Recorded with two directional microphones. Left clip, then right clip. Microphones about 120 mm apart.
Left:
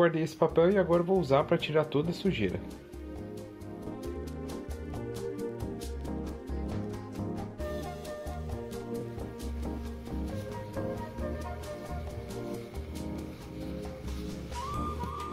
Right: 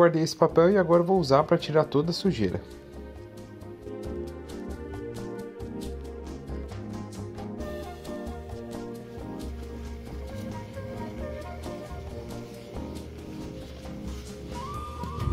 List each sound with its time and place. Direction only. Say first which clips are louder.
0.0 s speech: right 5 dB; 45° right (ahead or behind)